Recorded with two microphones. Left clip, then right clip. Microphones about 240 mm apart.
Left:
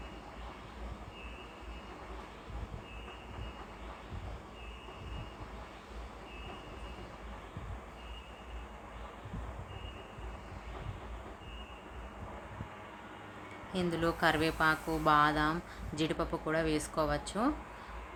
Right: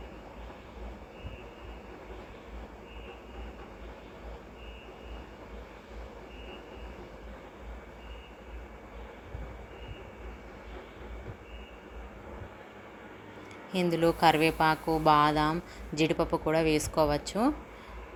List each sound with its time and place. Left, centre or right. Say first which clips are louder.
13.7 s a woman's voice: right 6 dB; centre